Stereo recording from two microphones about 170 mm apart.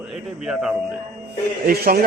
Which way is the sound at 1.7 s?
60° right (ahead or behind).